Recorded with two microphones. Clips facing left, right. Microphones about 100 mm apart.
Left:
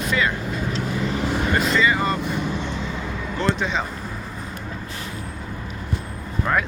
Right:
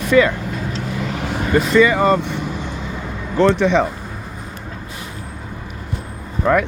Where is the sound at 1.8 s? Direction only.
70° right (ahead or behind).